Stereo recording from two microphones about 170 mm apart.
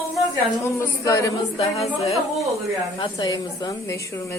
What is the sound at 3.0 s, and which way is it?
A woman's voice, 25° left (ahead or behind).